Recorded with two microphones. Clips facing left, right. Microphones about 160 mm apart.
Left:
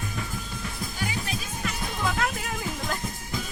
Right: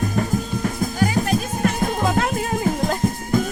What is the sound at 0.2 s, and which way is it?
Music, 50° right (ahead or behind).